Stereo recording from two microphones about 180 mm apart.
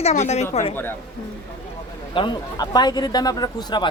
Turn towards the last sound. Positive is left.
turn(degrees=25)  # may be behind; listen again after turning